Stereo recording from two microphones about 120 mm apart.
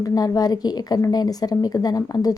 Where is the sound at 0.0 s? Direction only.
30° left (ahead or behind).